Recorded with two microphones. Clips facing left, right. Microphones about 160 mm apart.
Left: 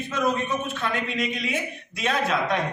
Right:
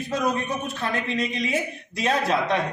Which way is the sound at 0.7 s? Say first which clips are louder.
Right 1 dB; 35° right (ahead or behind).